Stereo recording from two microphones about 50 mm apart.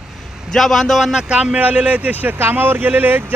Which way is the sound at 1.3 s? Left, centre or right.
Right.